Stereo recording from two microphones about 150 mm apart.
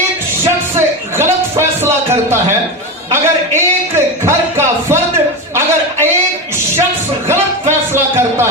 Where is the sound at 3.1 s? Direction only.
15° right (ahead or behind).